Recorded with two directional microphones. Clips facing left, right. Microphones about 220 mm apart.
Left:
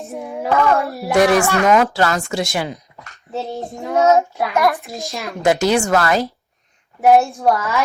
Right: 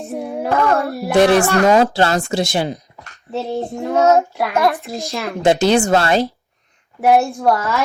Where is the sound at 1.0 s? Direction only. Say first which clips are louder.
Right 2 dB; 30° right (ahead or behind).